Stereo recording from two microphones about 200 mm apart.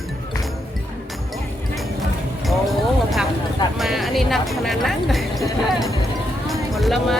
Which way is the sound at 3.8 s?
Centre (ahead or behind).